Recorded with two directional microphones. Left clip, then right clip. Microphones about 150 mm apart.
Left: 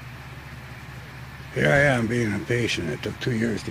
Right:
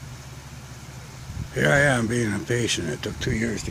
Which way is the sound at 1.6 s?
Centre (ahead or behind).